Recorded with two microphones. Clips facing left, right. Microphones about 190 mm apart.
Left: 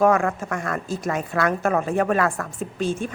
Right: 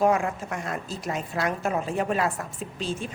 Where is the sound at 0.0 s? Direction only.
50° left (ahead or behind).